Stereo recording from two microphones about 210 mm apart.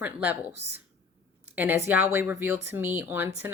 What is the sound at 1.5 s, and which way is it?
A woman's voice, 10° right (ahead or behind).